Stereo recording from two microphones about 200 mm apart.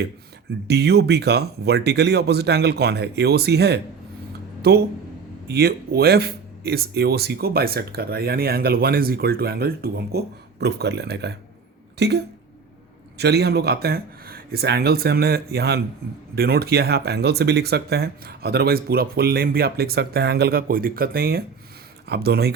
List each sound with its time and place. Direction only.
0.7 s speech: 55° right (ahead or behind)